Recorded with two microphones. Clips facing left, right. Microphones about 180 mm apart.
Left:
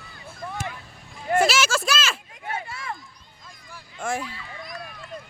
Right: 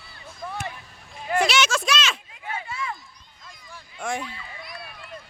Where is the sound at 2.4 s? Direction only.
50° left (ahead or behind).